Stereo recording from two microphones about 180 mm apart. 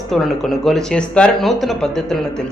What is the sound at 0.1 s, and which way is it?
Speech, centre (ahead or behind).